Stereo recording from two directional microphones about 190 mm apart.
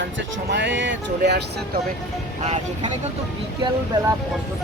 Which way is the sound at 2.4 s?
35° right (ahead or behind).